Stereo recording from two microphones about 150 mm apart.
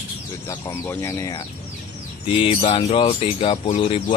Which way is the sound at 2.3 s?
35° left (ahead or behind).